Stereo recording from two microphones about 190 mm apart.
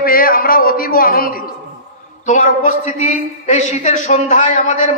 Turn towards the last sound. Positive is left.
turn(degrees=40)  # may be behind; listen again after turning